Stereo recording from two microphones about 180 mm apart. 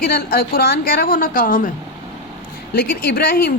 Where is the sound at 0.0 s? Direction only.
60° left (ahead or behind).